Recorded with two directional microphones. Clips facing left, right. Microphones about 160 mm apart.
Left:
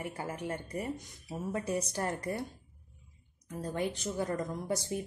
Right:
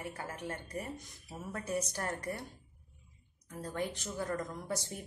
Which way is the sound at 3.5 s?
25° left (ahead or behind).